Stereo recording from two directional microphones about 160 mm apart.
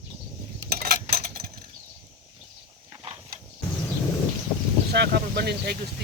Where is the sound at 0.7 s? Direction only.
80° right.